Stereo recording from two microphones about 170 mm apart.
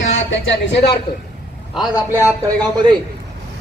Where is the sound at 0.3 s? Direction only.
80° left.